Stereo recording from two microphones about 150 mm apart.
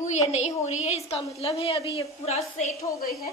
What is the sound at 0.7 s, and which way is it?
A woman's voice, 45° left (ahead or behind).